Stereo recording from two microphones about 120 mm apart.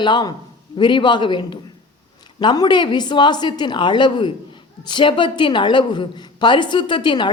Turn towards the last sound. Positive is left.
turn(degrees=40)  # may be behind; listen again after turning